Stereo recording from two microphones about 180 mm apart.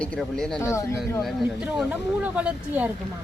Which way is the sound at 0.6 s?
15° left (ahead or behind).